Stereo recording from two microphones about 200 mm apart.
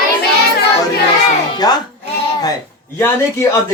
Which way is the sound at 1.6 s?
20° left (ahead or behind).